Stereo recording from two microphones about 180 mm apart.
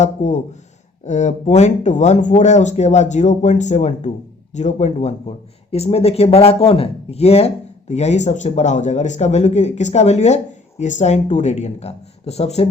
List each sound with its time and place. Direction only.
0.0 s speech: 40° left (ahead or behind)